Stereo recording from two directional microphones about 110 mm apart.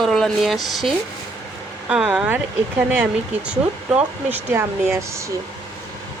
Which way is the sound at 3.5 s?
10° right (ahead or behind).